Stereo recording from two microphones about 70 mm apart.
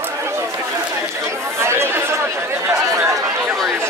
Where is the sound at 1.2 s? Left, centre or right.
Right.